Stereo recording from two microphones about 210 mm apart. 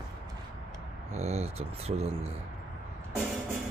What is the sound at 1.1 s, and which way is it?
Speech, 30° right (ahead or behind).